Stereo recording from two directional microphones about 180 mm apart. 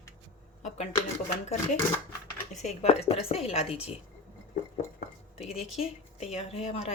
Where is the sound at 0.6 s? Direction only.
40° left (ahead or behind).